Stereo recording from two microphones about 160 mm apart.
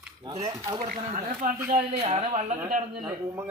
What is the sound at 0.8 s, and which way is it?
Speech, 55° right (ahead or behind).